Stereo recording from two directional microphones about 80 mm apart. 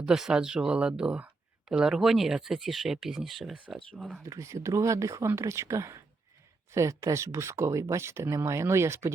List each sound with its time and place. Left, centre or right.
0.0 s speech: centre
4.2 s speech: right